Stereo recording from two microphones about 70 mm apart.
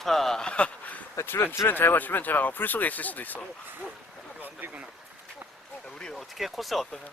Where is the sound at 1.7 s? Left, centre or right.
Left.